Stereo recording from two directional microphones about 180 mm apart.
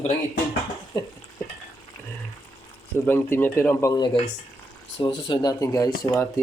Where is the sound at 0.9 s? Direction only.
20° left (ahead or behind).